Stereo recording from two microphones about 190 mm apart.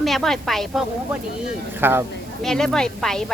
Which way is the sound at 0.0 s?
Centre (ahead or behind).